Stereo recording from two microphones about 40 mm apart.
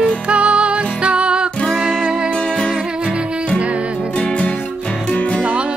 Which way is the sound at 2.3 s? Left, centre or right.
Left.